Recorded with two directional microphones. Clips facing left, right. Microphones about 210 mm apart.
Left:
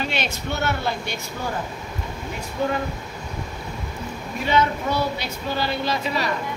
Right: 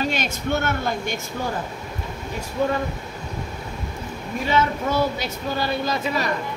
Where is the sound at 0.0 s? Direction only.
45° right (ahead or behind).